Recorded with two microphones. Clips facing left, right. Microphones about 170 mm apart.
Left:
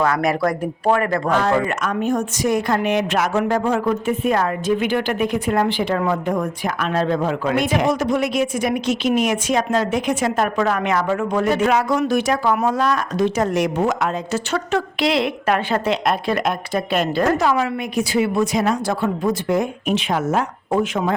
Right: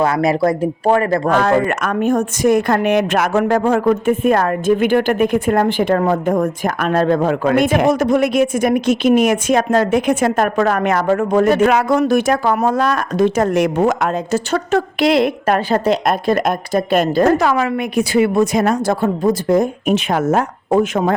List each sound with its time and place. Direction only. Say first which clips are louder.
0.0 s speech: right 4 dB; 25° right (ahead or behind)
1.3 s a woman's voice: right 4 dB; 55° right (ahead or behind)
17.4 s a woman's voice: right 3 dB; 65° right (ahead or behind); by 21.1 s 45° right (ahead or behind)